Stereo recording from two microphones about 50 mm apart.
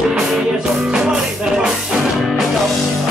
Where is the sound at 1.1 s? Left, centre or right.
Centre.